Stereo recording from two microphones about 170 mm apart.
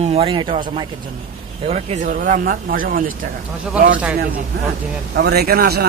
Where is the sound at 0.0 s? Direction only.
35° right (ahead or behind).